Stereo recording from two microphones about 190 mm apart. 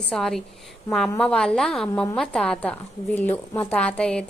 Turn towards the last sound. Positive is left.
turn(degrees=5)  # may be behind; listen again after turning